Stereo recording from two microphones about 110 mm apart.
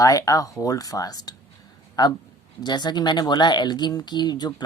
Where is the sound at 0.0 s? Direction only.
30° left (ahead or behind).